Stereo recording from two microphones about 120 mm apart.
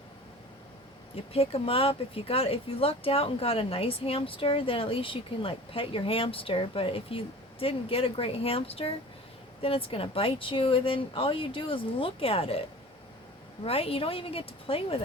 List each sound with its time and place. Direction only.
1.1 s speech: 55° left (ahead or behind)
13.7 s speech: 55° left (ahead or behind)